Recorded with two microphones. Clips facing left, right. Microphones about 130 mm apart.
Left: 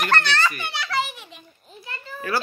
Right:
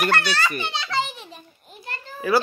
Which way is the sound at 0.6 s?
20° right (ahead or behind).